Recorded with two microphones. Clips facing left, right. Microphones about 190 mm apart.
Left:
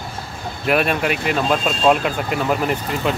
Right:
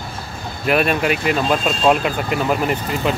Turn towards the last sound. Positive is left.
turn(degrees=-5)  # may be behind; listen again after turning